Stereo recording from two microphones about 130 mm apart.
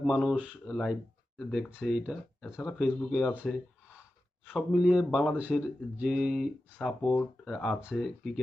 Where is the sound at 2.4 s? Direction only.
20° left (ahead or behind).